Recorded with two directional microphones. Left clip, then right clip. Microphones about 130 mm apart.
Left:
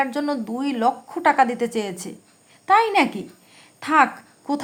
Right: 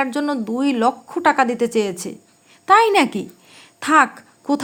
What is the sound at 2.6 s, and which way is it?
A woman's voice, 35° right (ahead or behind).